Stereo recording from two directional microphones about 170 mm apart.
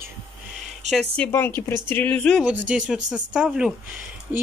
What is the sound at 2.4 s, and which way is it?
A woman's voice, 5° right (ahead or behind).